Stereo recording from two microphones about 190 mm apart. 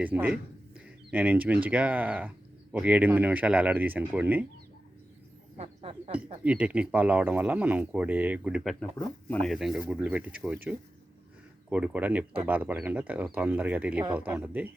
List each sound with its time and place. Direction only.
0.0 s speech: 10° right (ahead or behind)
5.5 s a sound: 30° right (ahead or behind)
6.4 s speech: 5° right (ahead or behind)
8.8 s speech: 10° left (ahead or behind); by 14.7 s 10° right (ahead or behind)